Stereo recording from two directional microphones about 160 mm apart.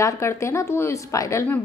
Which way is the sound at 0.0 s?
15° left (ahead or behind).